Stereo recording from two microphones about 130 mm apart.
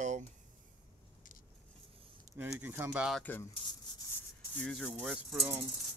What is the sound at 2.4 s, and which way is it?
Speech, 15° right (ahead or behind).